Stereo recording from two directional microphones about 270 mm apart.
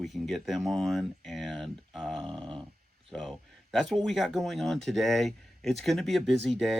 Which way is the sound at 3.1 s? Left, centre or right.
Centre.